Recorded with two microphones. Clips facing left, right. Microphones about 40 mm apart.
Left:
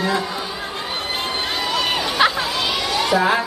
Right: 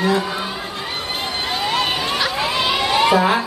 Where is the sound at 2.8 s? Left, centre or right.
Right.